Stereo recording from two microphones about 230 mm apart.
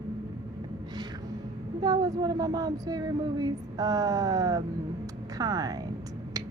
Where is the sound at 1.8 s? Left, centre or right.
Centre.